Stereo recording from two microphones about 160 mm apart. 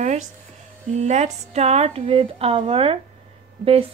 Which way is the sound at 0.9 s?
45° right (ahead or behind).